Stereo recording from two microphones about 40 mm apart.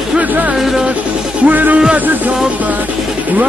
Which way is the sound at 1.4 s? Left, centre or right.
Right.